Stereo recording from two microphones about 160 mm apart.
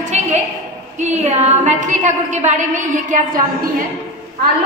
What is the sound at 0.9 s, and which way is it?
A woman's voice, 45° right (ahead or behind).